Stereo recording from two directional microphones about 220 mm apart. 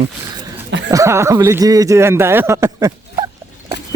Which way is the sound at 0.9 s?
15° right (ahead or behind).